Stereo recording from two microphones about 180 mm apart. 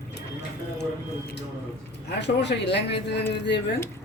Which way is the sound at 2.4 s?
70° left (ahead or behind).